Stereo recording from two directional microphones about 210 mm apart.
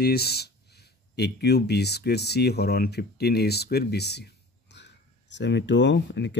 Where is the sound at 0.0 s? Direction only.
50° left (ahead or behind).